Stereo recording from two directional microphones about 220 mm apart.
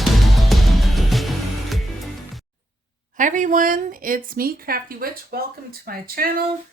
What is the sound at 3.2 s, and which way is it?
A woman's voice, 35° right (ahead or behind).